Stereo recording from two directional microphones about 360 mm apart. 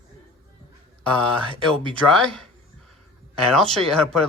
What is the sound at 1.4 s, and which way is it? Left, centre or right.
Speech, centre.